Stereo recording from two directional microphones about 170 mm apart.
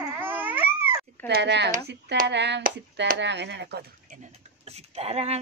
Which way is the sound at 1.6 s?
65° right (ahead or behind).